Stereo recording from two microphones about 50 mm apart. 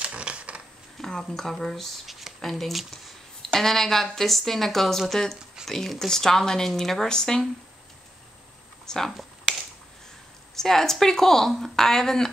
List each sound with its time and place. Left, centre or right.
0.0 s typewriter: right
0.9 s speech: centre
8.8 s speech: centre
9.1 s finger snapping: centre
10.5 s speech: centre